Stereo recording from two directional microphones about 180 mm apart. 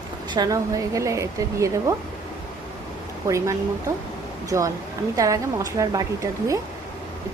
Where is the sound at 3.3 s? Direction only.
15° right (ahead or behind).